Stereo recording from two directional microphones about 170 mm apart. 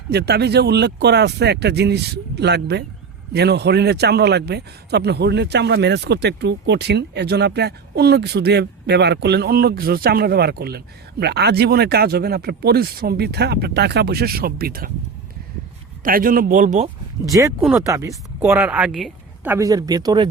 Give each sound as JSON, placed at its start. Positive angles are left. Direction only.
{"t": 0.1, "sound": "a man's voice", "side_deg": -75}
{"t": 16.0, "sound": "speech", "side_deg": -55}
{"t": 17.2, "sound": "speech", "side_deg": -20}
{"t": 17.6, "sound": "speech", "side_deg": -10}
{"t": 17.8, "sound": "a woman's voice", "side_deg": -20}
{"t": 19.5, "sound": "speech", "side_deg": -20}